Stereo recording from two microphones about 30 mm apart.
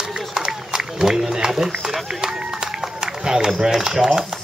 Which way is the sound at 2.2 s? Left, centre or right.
Right.